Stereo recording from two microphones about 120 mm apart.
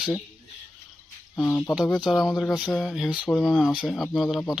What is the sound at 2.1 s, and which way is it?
Speech, centre (ahead or behind).